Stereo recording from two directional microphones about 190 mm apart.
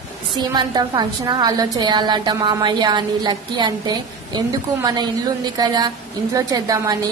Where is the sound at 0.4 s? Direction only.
20° right (ahead or behind).